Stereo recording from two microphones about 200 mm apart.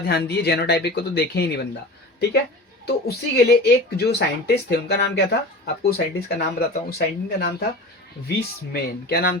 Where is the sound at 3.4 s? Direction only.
55° left (ahead or behind).